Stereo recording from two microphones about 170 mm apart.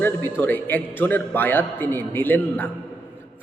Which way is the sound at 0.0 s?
10° left (ahead or behind).